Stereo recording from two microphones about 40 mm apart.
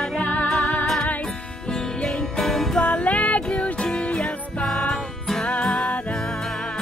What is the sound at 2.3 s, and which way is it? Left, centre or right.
Music, centre.